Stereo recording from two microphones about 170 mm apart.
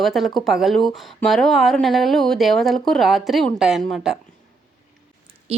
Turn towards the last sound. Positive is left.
turn(degrees=-35)  # may be behind; listen again after turning